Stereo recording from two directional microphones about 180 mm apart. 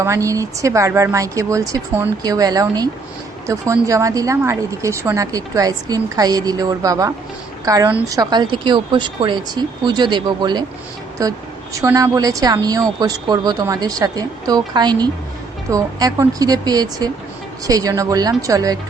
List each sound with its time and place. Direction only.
0.0 s a woman's voice: 15° right (ahead or behind)